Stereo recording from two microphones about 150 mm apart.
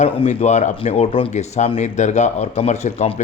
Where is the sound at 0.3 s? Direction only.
50° left (ahead or behind).